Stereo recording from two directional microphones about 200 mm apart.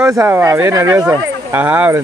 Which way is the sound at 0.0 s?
15° right (ahead or behind).